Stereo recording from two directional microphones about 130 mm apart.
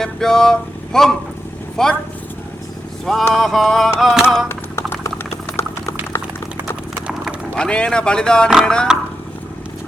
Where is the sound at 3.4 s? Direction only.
Centre (ahead or behind).